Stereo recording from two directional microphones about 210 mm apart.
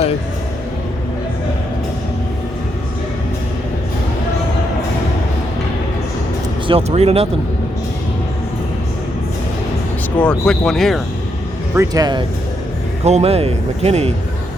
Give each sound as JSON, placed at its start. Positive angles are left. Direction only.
{"t": 6.7, "sound": "speech", "side_deg": -30}
{"t": 10.2, "sound": "speech", "side_deg": 5}
{"t": 11.7, "sound": "speech", "side_deg": -15}
{"t": 13.1, "sound": "speech", "side_deg": -30}